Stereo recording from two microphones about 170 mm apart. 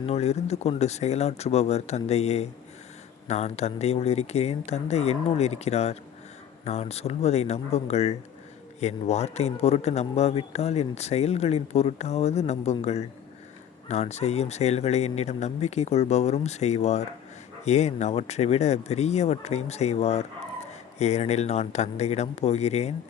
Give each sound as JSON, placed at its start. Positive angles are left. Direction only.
{"t": 0.0, "sound": "a man's voice", "side_deg": 40}